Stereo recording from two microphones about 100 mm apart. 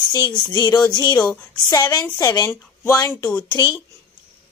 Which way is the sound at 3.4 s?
50° left (ahead or behind).